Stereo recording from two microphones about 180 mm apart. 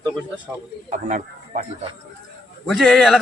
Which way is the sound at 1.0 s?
45° right (ahead or behind).